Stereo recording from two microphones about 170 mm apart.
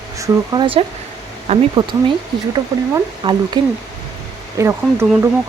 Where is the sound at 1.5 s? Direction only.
40° right (ahead or behind).